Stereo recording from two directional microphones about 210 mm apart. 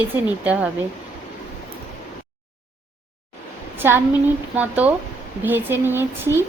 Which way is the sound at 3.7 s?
10° right (ahead or behind).